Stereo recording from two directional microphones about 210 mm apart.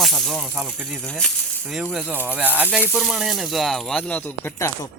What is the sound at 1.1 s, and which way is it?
Speech, 5° left (ahead or behind).